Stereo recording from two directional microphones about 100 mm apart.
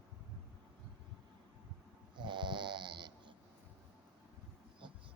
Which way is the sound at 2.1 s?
50° right (ahead or behind).